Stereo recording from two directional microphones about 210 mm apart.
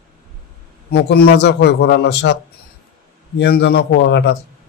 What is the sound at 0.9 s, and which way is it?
Speech, 50° left (ahead or behind).